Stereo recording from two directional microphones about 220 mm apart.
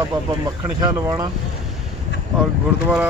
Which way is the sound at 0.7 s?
15° right (ahead or behind).